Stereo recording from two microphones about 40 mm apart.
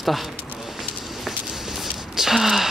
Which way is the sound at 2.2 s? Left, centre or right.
Centre.